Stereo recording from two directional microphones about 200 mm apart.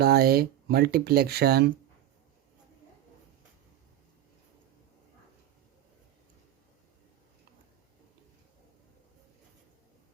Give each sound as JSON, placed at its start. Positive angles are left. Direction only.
{"t": 0.0, "sound": "speech", "side_deg": -50}